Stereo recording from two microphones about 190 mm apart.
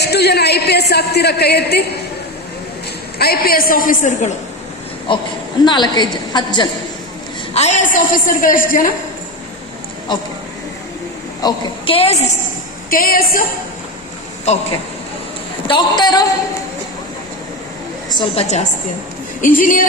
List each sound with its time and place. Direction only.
0.0 s speech: 60° left (ahead or behind)
3.2 s a woman's voice: 55° left (ahead or behind)
5.1 s a woman's voice: 25° left (ahead or behind)
7.5 s a woman's voice: 35° left (ahead or behind)
11.4 s a woman's voice: 30° left (ahead or behind)
12.9 s a woman's voice: 50° left (ahead or behind)
14.5 s a woman's voice: 35° left (ahead or behind)
15.6 s a woman's voice: 25° left (ahead or behind)
18.3 s a woman's voice: 35° left (ahead or behind)